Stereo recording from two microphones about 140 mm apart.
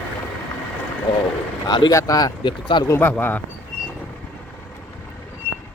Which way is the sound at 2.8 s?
15° left (ahead or behind).